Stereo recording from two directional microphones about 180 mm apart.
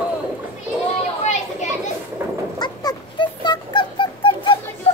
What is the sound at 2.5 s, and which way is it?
Dog, 25° left (ahead or behind).